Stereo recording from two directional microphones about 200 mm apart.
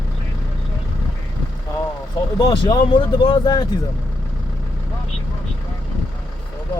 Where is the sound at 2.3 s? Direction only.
20° left (ahead or behind).